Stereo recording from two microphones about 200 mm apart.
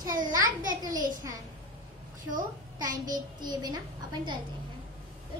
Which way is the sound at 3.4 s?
20° right (ahead or behind).